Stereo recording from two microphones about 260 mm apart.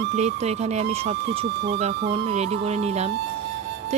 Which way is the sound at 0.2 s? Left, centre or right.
Right.